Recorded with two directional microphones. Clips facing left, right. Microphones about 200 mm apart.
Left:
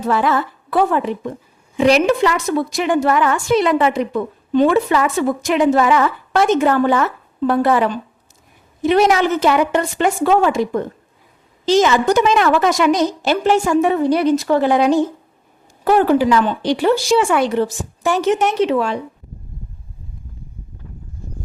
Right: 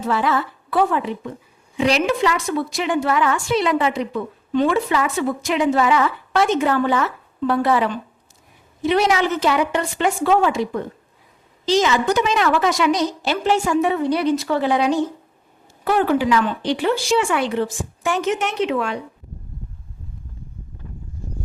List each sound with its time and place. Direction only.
0.1 s a woman's voice: 50° left (ahead or behind)